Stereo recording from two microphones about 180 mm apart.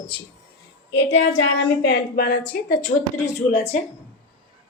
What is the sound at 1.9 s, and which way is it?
Speech, 55° left (ahead or behind).